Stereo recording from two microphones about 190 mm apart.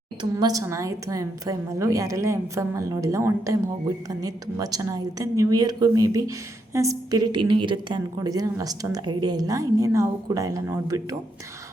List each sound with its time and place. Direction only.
0.2 s a woman's voice: 20° right (ahead or behind)